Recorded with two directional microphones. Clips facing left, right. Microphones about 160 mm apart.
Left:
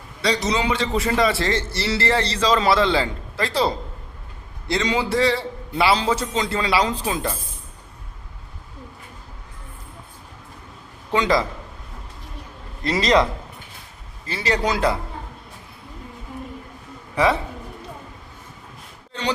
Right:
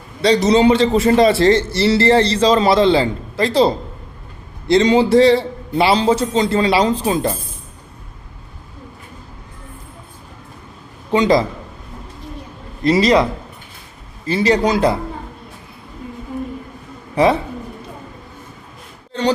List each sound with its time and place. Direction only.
0.2 s a man's voice: 30° right (ahead or behind)
11.1 s a man's voice: 15° right (ahead or behind)
12.8 s a man's voice: 10° right (ahead or behind)
14.3 s a man's voice: 15° right (ahead or behind)